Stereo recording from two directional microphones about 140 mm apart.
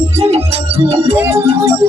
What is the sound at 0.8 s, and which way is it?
Music, 50° right (ahead or behind).